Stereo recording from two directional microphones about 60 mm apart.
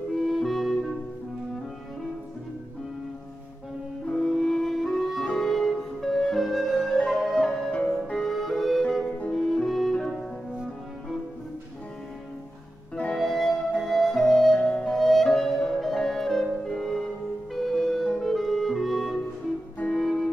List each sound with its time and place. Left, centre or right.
0.1 s music: centre
4.1 s music: centre
13.1 s music: centre
14.6 s music: centre
14.9 s music: centre
17.6 s clarinet: centre
19.9 s music: centre